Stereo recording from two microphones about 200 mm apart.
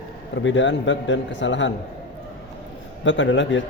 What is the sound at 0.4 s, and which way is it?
A man's voice, 65° left (ahead or behind).